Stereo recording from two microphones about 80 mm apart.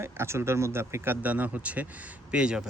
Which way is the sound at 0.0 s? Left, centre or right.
Right.